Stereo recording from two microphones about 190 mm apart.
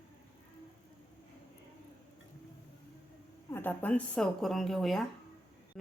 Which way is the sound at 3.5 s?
10° left (ahead or behind).